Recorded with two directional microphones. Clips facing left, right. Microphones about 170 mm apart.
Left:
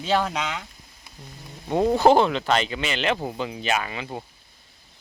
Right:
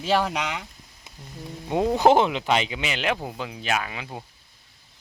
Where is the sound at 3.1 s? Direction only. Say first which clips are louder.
Left 4 dB; centre (ahead or behind).